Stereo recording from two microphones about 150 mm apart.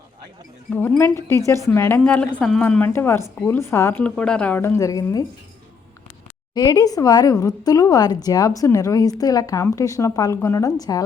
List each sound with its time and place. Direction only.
0.7 s speech: 10° left (ahead or behind)
6.5 s speech: 25° left (ahead or behind)